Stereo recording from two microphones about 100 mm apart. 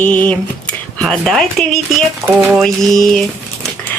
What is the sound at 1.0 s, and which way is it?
Speech, 5° left (ahead or behind).